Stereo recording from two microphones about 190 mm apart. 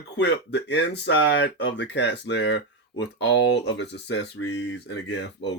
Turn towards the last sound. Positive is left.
turn(degrees=65)  # may be behind; listen again after turning